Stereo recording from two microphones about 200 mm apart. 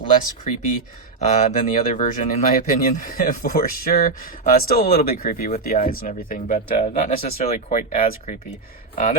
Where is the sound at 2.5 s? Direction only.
45° left (ahead or behind).